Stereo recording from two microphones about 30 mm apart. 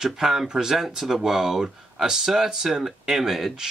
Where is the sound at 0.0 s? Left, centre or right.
Centre.